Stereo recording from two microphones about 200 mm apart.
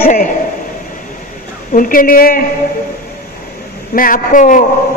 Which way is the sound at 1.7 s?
45° left (ahead or behind).